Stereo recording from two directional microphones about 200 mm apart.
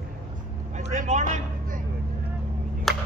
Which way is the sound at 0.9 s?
35° right (ahead or behind).